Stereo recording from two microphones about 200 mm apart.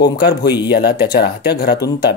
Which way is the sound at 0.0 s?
55° left (ahead or behind).